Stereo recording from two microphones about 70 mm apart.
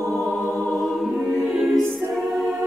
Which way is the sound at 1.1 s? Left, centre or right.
Centre.